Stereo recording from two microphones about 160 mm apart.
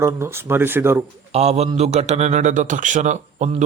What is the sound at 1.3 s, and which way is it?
Speech, 40° right (ahead or behind).